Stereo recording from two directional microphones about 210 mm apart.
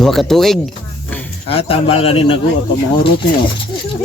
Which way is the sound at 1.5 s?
25° left (ahead or behind).